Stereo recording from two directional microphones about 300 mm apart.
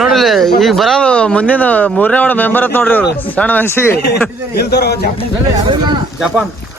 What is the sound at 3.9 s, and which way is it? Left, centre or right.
Speech, left.